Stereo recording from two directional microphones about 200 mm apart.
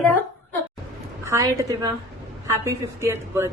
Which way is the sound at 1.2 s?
15° right (ahead or behind).